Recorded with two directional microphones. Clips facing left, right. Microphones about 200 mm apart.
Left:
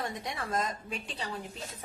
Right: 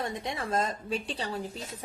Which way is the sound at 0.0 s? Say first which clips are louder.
Right 3 dB; 25° right (ahead or behind).